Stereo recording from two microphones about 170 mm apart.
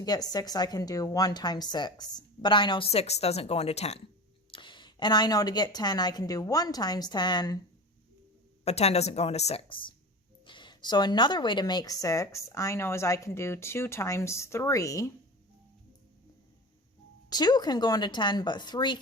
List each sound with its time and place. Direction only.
0.0 s a woman's voice: 25° left (ahead or behind); by 4.0 s 40° left (ahead or behind)
4.5 s a woman's voice: 30° left (ahead or behind)
8.6 s a woman's voice: 40° left (ahead or behind); by 15.1 s 20° left (ahead or behind)
17.2 s a woman's voice: 25° left (ahead or behind)